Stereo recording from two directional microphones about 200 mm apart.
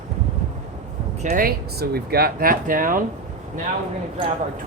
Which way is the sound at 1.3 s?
50° right (ahead or behind).